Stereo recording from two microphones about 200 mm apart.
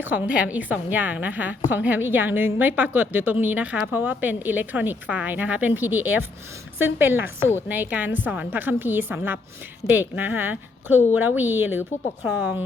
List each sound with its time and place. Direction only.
0.0 s a woman's voice: 5° right (ahead or behind)